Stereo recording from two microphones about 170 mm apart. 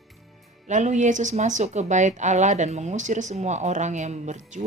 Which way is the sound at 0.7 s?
45° right (ahead or behind).